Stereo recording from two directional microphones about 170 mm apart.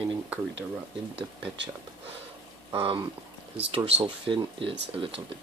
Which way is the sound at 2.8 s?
30° right (ahead or behind).